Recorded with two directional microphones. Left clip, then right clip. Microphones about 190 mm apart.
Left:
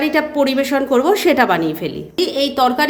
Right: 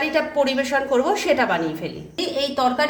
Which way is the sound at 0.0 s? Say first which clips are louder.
Left 4 dB; 40° left (ahead or behind).